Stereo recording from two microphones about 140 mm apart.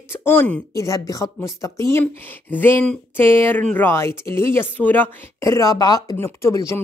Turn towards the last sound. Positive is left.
turn(degrees=20)  # may be behind; listen again after turning